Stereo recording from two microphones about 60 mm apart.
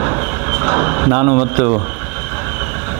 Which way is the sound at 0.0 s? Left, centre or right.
Right.